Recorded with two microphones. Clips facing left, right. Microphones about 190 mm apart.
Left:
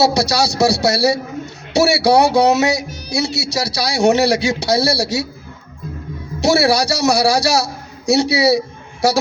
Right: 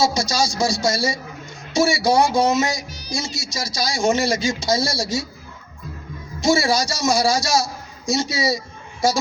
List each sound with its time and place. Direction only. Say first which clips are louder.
0.0 s speech: left 5 dB; 65° left (ahead or behind)
6.4 s a man's voice: left 4 dB; 65° left (ahead or behind)